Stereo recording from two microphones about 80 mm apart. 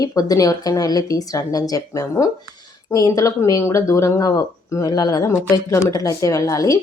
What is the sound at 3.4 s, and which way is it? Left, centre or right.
A woman's voice, left.